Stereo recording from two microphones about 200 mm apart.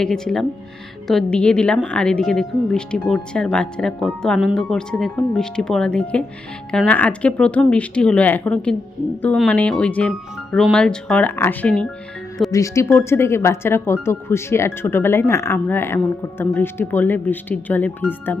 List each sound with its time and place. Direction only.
0.0 s speech: centre (ahead or behind)